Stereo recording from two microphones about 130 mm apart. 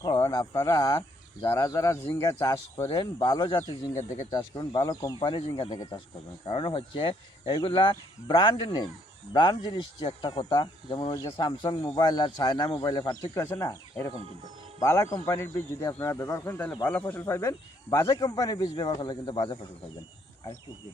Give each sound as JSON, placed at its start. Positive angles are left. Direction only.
{"t": 0.3, "sound": "speech", "side_deg": 25}
{"t": 5.4, "sound": "speech", "side_deg": 55}
{"t": 6.5, "sound": "speech", "side_deg": 40}
{"t": 13.3, "sound": "speech", "side_deg": 20}
{"t": 14.8, "sound": "speech", "side_deg": 20}
{"t": 17.2, "sound": "speech", "side_deg": 20}